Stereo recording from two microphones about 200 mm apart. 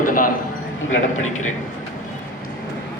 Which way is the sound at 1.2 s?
90° left.